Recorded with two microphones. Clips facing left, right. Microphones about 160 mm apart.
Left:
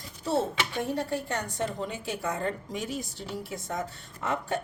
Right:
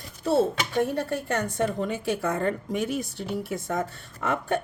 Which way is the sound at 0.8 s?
55° right (ahead or behind).